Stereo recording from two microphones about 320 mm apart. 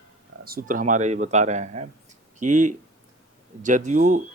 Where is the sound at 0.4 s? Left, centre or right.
Right.